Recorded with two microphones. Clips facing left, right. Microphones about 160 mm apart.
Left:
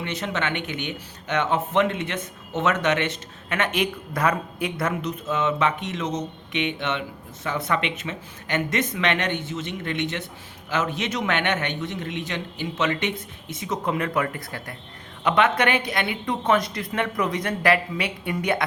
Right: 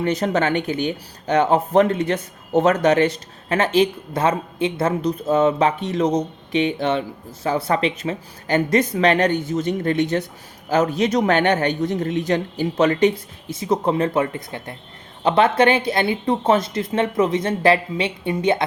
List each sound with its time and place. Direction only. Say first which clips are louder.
0.0 s a woman's voice: right 8 dB; 40° right (ahead or behind); by 18.6 s 25° right (ahead or behind)